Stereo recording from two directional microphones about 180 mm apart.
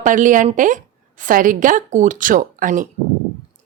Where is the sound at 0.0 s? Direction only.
45° right (ahead or behind).